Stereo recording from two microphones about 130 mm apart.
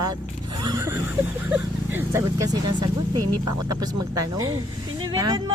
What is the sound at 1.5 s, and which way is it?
Speech, 15° right (ahead or behind).